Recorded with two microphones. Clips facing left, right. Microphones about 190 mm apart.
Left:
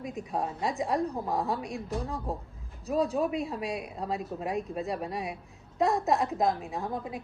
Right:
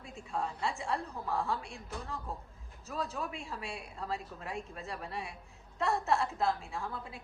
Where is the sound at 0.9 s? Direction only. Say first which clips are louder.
Left 7 dB; 35° left (ahead or behind).